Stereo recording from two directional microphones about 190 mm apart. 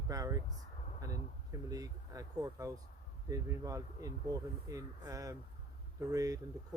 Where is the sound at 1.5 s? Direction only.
20° right (ahead or behind).